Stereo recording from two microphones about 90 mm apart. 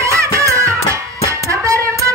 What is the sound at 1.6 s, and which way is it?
Music, 35° right (ahead or behind).